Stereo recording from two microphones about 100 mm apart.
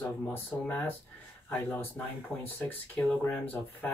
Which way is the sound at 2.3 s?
Centre (ahead or behind).